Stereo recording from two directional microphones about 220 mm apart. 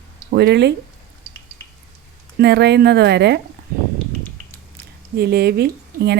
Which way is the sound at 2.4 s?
50° right (ahead or behind).